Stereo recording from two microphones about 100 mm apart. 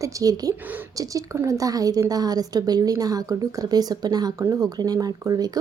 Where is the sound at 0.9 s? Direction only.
35° right (ahead or behind).